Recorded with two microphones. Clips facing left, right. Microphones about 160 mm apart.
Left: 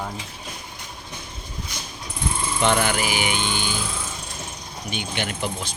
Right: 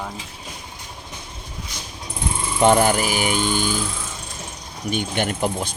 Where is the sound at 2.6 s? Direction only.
40° right (ahead or behind).